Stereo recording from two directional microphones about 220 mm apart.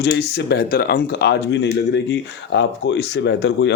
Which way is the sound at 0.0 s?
50° left (ahead or behind).